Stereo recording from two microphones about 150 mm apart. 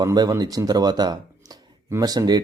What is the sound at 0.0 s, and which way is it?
Speech, 25° right (ahead or behind).